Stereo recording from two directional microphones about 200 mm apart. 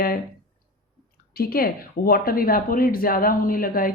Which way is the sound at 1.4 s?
50° left (ahead or behind).